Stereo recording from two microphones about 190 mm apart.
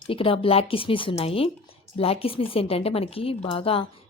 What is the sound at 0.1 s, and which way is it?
A woman's voice, 30° left (ahead or behind).